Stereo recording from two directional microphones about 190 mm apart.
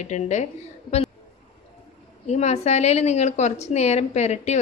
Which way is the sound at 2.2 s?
35° left (ahead or behind).